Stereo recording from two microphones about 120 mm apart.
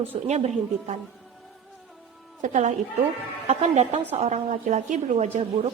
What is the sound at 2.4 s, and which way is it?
Speech, 90° right.